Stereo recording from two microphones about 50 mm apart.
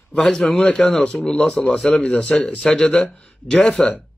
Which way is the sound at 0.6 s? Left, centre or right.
Left.